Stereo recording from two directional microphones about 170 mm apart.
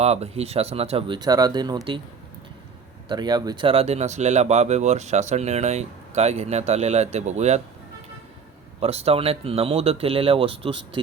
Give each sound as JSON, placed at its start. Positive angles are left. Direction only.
{"t": 0.0, "sound": "speech", "side_deg": -40}
{"t": 3.1, "sound": "speech", "side_deg": -25}
{"t": 8.8, "sound": "speech", "side_deg": -35}